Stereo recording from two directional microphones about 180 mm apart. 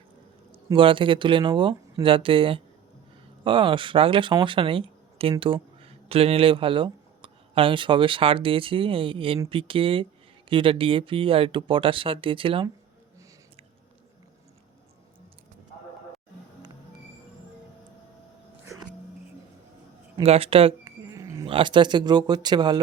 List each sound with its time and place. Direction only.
0.5 s speech: 30° right (ahead or behind)
20.2 s speech: 35° right (ahead or behind)
20.8 s a sound: 15° right (ahead or behind)
21.4 s speech: 30° right (ahead or behind)